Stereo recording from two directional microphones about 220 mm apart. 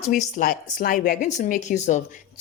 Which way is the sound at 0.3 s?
40° left (ahead or behind).